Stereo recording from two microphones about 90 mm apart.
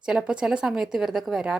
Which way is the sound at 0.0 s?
10° right (ahead or behind).